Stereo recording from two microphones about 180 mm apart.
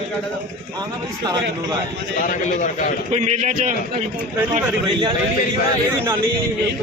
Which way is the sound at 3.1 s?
40° right (ahead or behind).